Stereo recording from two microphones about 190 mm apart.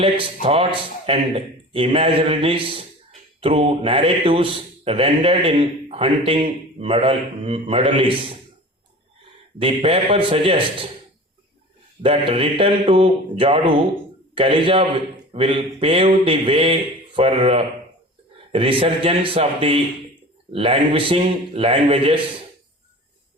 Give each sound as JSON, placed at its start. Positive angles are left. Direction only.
{"t": 0.4, "sound": "a man's voice", "side_deg": -30}
{"t": 9.6, "sound": "a man's voice", "side_deg": -30}
{"t": 12.0, "sound": "a man's voice", "side_deg": -30}